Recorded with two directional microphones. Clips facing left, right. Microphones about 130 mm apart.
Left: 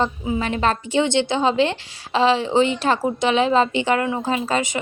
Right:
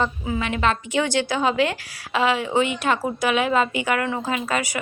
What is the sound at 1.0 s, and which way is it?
A woman's voice, 25° left (ahead or behind).